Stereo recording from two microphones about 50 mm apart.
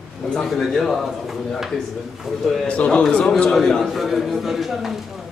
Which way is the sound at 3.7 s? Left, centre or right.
Centre.